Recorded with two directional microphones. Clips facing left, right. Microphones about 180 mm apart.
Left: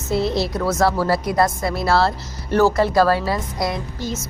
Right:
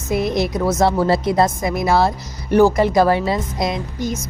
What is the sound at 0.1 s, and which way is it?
A woman's voice, 15° right (ahead or behind).